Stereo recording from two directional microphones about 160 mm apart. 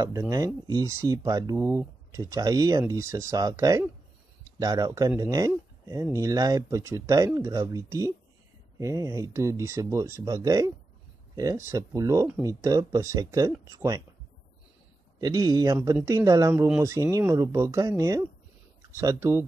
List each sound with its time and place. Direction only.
0.0 s speech: 20° right (ahead or behind)
15.1 s speech: 25° right (ahead or behind)
16.5 s speech: 5° right (ahead or behind)
16.8 s speech: 20° right (ahead or behind)